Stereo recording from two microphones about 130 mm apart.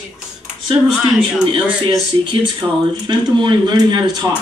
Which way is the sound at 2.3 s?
35° right (ahead or behind).